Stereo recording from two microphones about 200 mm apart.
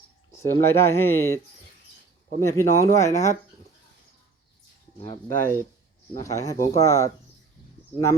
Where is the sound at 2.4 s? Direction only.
15° left (ahead or behind).